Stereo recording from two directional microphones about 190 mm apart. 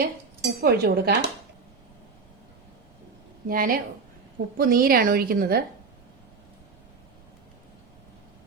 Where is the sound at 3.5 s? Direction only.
50° right (ahead or behind).